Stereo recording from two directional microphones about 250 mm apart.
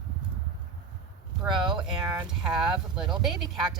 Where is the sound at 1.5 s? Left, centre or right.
Centre.